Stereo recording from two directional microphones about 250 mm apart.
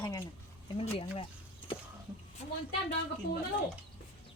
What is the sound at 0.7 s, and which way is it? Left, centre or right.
Speech, left.